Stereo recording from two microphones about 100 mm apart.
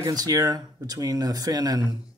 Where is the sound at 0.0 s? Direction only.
35° right (ahead or behind).